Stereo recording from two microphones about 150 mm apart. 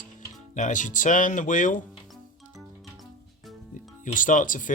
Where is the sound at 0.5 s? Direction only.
55° left (ahead or behind).